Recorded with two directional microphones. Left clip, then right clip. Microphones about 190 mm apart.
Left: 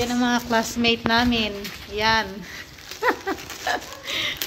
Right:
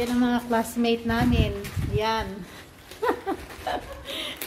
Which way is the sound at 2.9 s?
15° left (ahead or behind).